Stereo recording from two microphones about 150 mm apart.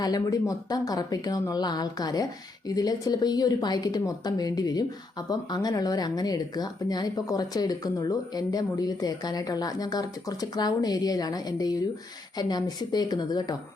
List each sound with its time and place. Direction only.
0.0 s speech: 25° left (ahead or behind)